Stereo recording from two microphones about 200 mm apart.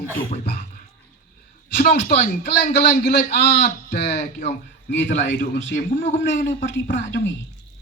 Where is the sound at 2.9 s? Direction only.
45° left (ahead or behind).